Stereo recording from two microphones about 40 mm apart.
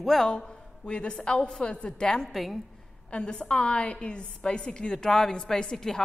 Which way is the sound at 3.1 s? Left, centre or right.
Left.